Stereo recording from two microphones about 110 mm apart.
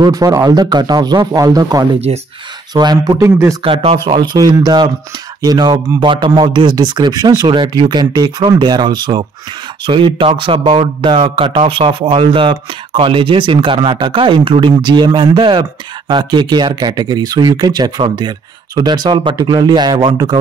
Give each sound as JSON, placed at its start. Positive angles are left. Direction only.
{"t": 0.0, "sound": "speech", "side_deg": -35}
{"t": 2.1, "sound": "speech", "side_deg": -60}
{"t": 2.7, "sound": "speech", "side_deg": -40}
{"t": 3.2, "sound": "speech", "side_deg": -25}
{"t": 4.0, "sound": "speech", "side_deg": -45}